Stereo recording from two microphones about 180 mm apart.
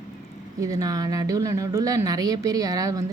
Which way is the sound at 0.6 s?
20° right (ahead or behind).